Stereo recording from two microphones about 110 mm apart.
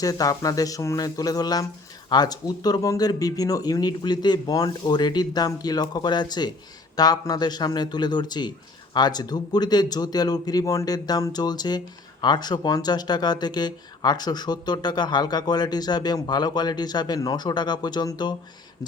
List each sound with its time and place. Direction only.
0.0 s speech: 35° left (ahead or behind)